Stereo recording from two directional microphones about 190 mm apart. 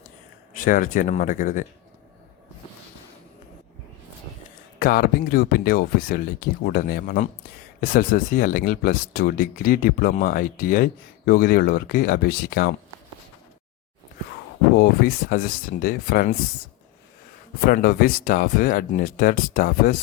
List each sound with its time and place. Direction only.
0.5 s speech: 45° left (ahead or behind)
4.8 s speech: 50° left (ahead or behind)
14.8 s speech: 50° left (ahead or behind)
17.7 s speech: 50° left (ahead or behind)